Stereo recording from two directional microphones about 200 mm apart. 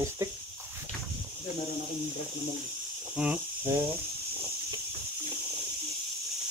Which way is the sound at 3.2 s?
5° right (ahead or behind).